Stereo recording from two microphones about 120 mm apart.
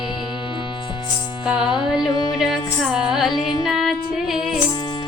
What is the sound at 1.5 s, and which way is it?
Music, 5° right (ahead or behind).